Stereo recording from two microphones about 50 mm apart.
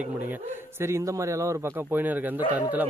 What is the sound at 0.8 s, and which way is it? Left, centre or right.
Speech, right.